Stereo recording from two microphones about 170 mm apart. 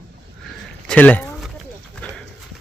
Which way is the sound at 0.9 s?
10° left (ahead or behind).